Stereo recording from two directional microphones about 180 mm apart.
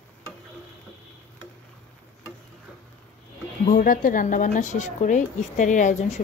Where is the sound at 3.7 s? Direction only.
50° left (ahead or behind).